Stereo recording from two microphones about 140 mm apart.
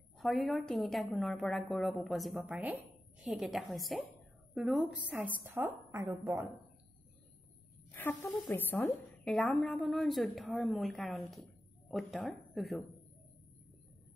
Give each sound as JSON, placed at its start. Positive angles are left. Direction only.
{"t": 0.2, "sound": "a woman's voice", "side_deg": 0}
{"t": 2.4, "sound": "a woman's voice", "side_deg": -10}
{"t": 5.1, "sound": "a woman's voice", "side_deg": -15}
{"t": 7.9, "sound": "speech", "side_deg": 15}
{"t": 8.8, "sound": "a woman's voice", "side_deg": 0}